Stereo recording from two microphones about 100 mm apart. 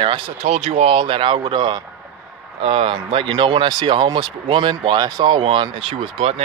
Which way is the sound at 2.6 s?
65° right (ahead or behind).